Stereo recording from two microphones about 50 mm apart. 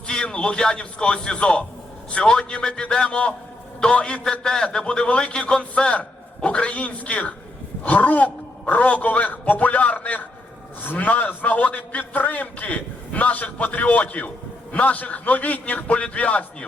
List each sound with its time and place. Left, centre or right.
0.1 s a man's voice: centre